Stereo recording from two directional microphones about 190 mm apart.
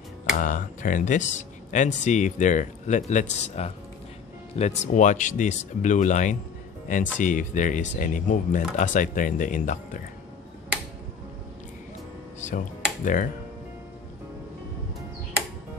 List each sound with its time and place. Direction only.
0.4 s speech: 45° left (ahead or behind)
13.0 s speech: 45° left (ahead or behind)